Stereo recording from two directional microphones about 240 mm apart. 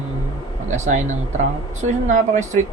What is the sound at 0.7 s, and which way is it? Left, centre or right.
Speech, right.